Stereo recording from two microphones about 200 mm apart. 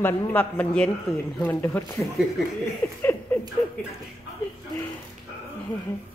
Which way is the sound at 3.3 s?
10° left (ahead or behind).